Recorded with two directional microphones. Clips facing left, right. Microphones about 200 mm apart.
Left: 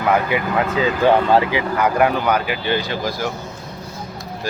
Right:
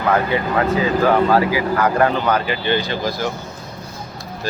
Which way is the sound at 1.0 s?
25° left (ahead or behind).